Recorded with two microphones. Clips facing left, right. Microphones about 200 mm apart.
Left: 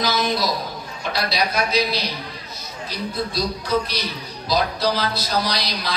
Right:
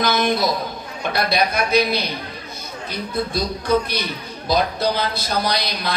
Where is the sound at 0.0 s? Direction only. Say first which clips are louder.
Right 3 dB; 55° right (ahead or behind).